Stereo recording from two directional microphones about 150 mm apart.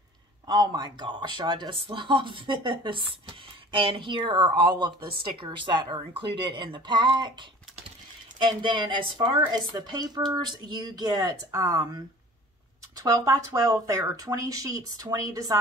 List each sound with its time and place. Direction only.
0.5 s speech: 30° right (ahead or behind)